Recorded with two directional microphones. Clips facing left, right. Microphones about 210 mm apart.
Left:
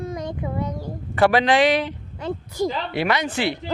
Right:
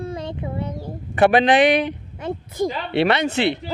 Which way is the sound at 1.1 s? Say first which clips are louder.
Right 2 dB; 20° right (ahead or behind).